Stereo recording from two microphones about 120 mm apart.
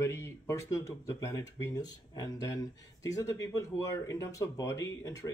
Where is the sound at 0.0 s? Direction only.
25° left (ahead or behind).